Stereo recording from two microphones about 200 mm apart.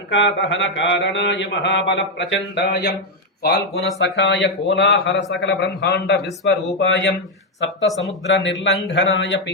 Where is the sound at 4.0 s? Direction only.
65° left (ahead or behind).